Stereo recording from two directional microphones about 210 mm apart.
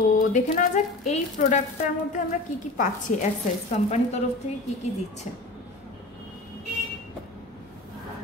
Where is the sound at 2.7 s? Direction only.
40° left (ahead or behind).